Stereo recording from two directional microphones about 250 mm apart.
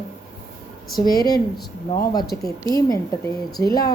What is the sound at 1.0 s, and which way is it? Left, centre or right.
Speech, centre.